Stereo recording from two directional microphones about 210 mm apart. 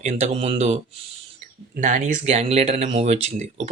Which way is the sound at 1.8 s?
35° right (ahead or behind).